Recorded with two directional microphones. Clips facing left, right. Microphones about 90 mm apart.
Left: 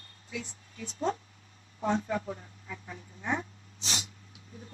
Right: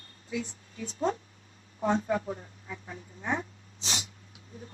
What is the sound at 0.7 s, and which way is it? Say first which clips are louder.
A woman's voice: right 2 dB; 35° right (ahead or behind).